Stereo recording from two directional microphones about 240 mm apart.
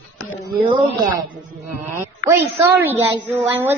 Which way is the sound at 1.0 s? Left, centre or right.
Right.